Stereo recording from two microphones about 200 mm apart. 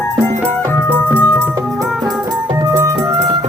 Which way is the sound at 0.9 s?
10° left (ahead or behind).